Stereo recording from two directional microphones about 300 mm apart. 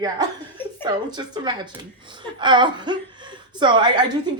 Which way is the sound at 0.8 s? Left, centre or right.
Centre.